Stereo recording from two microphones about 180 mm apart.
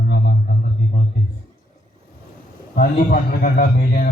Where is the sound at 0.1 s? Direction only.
70° left (ahead or behind).